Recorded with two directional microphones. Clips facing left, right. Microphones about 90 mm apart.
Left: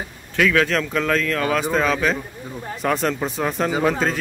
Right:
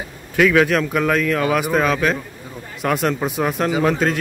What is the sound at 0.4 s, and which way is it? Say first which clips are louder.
Speech: right 4 dB; 10° right (ahead or behind).